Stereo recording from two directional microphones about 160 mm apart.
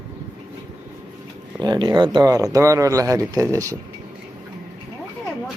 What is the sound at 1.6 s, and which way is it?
Speech, 25° right (ahead or behind).